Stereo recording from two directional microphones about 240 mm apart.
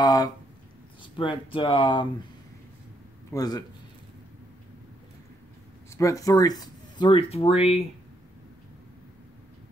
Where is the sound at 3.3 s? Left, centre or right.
Centre.